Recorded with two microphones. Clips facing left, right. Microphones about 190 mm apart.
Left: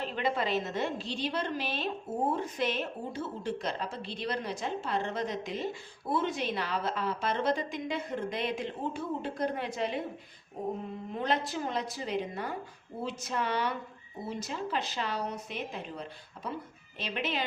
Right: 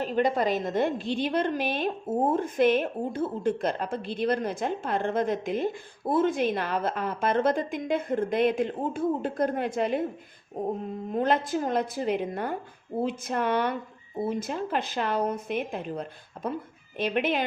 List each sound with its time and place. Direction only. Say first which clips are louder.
0.0 s a woman's voice: right 7 dB; 40° right (ahead or behind)
11.1 s a woman's voice: right 6 dB; 50° right (ahead or behind)